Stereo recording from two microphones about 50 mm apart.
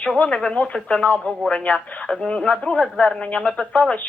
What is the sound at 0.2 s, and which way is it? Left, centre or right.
Speech, centre.